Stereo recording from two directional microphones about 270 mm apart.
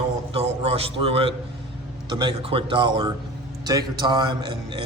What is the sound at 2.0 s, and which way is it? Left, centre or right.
A man's voice, centre.